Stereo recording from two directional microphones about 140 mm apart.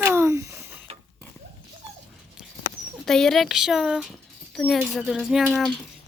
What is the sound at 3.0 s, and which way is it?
Speech, 5° left (ahead or behind).